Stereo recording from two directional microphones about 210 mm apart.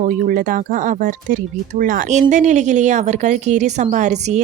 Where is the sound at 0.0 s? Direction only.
40° right (ahead or behind).